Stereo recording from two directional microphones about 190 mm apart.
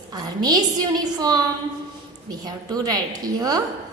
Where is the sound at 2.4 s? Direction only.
20° right (ahead or behind).